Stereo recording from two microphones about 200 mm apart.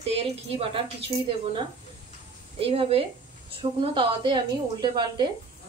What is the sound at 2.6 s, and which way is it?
A woman's voice, 30° right (ahead or behind).